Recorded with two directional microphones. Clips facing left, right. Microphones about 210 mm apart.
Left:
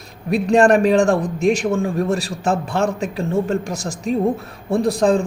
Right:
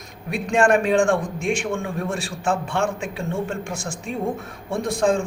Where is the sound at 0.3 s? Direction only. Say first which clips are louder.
Left 5 dB; 35° left (ahead or behind).